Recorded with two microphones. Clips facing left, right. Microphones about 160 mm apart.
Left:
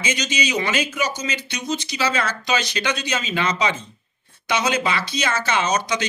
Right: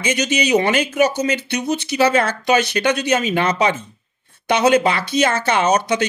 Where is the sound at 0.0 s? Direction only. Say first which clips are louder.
Right 5 dB; 60° right (ahead or behind).